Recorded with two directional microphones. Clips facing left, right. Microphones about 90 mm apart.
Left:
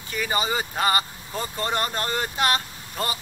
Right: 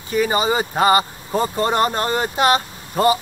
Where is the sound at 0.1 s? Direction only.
25° right (ahead or behind).